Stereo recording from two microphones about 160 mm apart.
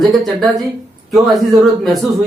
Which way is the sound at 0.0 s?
Centre (ahead or behind).